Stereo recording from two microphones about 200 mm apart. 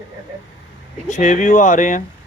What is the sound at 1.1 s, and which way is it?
Speech, 40° left (ahead or behind).